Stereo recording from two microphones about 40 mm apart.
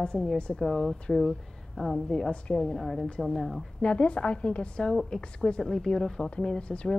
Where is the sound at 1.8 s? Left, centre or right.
Left.